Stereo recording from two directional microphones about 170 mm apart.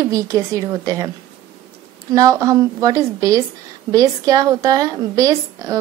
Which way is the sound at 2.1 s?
20° right (ahead or behind).